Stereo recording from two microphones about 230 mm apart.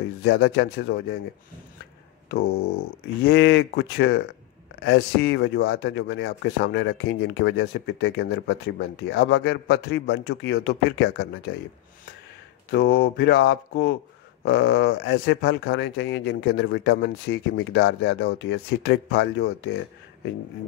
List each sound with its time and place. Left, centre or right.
0.2 s speech: left
3.3 s speech: left
12.7 s speech: left